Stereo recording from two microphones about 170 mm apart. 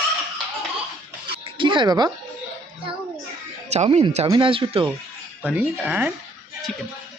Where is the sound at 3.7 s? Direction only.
40° right (ahead or behind).